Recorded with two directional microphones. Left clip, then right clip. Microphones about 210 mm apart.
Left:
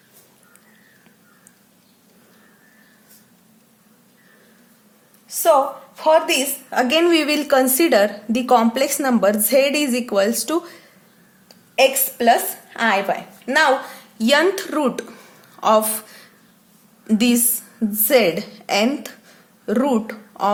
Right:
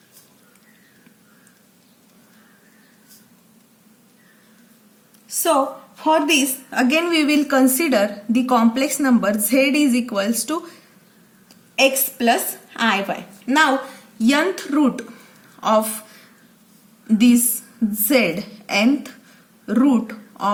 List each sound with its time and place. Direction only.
6.0 s a woman's voice: 35° left (ahead or behind)
11.8 s a woman's voice: 35° left (ahead or behind)
17.1 s a woman's voice: 35° left (ahead or behind)